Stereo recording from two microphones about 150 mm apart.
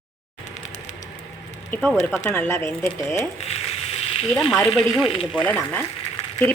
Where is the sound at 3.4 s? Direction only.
45° left (ahead or behind).